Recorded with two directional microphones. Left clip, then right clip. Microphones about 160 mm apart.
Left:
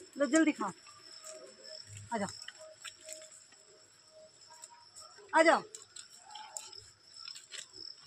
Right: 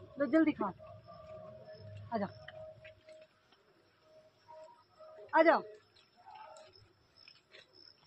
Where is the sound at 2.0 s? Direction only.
40° left (ahead or behind).